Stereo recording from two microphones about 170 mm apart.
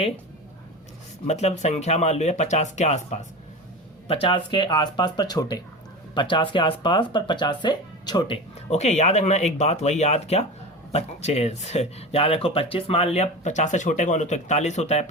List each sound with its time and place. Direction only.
1.3 s speech: 40° left (ahead or behind)
4.1 s speech: 30° left (ahead or behind)
8.7 s speech: 40° left (ahead or behind)